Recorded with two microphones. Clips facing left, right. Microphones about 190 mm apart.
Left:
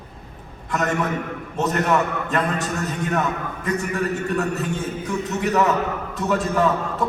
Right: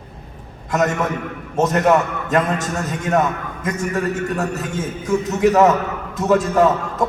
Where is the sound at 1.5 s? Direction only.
40° right (ahead or behind).